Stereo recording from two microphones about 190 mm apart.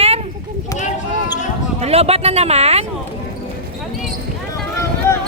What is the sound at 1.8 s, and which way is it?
Speech, 35° right (ahead or behind).